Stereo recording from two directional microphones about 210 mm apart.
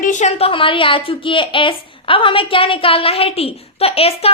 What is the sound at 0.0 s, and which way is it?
A woman's voice, 35° left (ahead or behind).